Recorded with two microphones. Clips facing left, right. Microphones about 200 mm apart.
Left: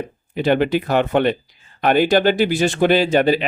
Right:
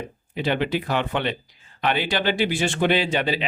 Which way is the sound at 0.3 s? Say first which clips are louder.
Left 7 dB; 50° left (ahead or behind).